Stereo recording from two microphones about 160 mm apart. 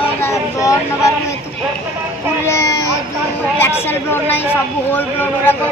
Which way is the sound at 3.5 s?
15° left (ahead or behind).